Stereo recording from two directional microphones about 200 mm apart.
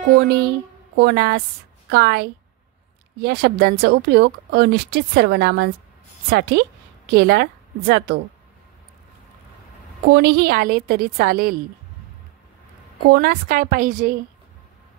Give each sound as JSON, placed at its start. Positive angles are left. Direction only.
{"t": 0.0, "sound": "a woman's voice", "side_deg": -55}
{"t": 7.1, "sound": "a woman's voice", "side_deg": -55}
{"t": 10.0, "sound": "a woman's voice", "side_deg": -55}
{"t": 13.1, "sound": "a woman's voice", "side_deg": -50}